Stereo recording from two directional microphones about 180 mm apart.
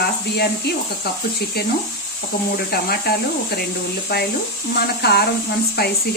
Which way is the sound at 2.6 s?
60° left (ahead or behind).